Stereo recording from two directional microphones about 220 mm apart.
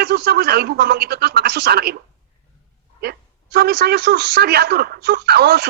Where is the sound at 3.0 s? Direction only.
45° right (ahead or behind).